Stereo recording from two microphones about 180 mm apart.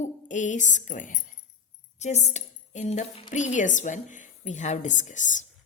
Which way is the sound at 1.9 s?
40° left (ahead or behind).